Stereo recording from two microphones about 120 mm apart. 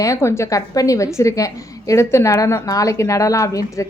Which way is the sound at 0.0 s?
25° left (ahead or behind).